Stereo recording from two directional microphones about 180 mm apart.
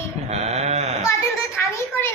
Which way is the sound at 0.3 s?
35° right (ahead or behind).